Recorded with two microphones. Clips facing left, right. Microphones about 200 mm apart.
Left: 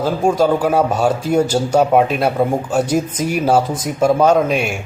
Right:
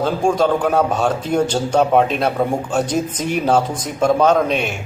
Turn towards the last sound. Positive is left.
turn(degrees=10)  # may be behind; listen again after turning